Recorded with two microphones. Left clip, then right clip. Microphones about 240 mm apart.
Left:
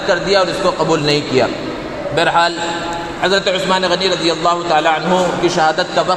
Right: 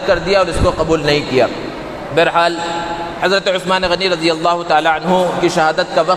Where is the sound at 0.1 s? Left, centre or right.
Right.